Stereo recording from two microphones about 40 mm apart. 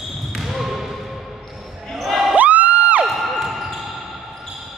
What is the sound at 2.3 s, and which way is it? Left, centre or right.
Music, right.